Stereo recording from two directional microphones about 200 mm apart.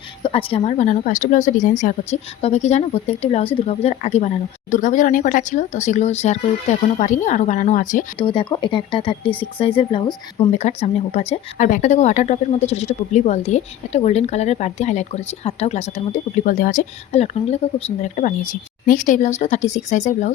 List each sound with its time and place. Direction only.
0.2 s speech: 30° left (ahead or behind)
8.2 s speech: 25° left (ahead or behind)